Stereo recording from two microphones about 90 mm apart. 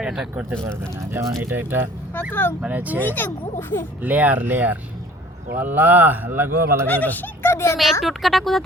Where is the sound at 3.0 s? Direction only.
25° left (ahead or behind).